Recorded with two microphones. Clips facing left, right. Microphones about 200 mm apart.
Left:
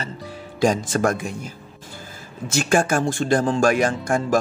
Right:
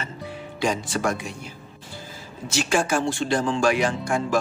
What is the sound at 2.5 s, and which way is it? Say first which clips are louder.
Speech: left 3 dB; 50° left (ahead or behind).